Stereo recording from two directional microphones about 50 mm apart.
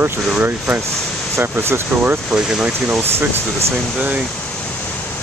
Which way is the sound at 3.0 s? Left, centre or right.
Right.